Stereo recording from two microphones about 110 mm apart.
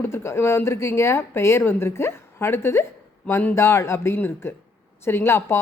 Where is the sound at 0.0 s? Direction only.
25° left (ahead or behind).